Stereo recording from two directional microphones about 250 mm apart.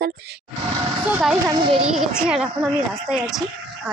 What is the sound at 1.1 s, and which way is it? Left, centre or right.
Speech, centre.